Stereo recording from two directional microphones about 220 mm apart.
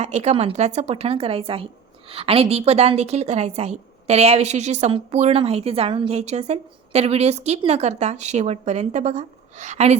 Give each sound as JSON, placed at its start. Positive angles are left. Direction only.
{"t": 0.0, "sound": "speech", "side_deg": -30}